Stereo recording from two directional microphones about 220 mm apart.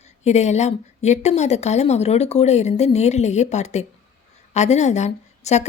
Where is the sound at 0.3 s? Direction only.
30° left (ahead or behind).